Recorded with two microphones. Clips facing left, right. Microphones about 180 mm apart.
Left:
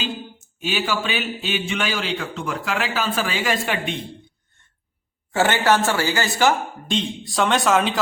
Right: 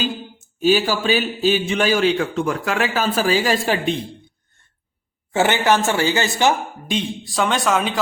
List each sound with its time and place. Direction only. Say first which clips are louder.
0.6 s a man's voice: right 7 dB; 40° right (ahead or behind)
5.3 s speech: right 1 dB; 20° right (ahead or behind)
6.9 s a man's voice: right 1 dB; centre (ahead or behind)